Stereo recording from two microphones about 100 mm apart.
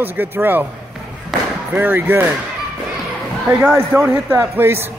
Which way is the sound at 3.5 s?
15° right (ahead or behind).